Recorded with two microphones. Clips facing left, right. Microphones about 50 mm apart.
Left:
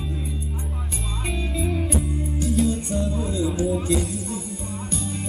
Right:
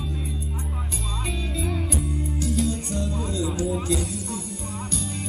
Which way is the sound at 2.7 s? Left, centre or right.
Left.